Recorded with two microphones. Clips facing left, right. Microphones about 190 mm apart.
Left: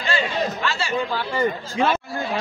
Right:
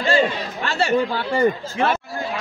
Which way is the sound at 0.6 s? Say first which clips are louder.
Right 5 dB; 55° right (ahead or behind).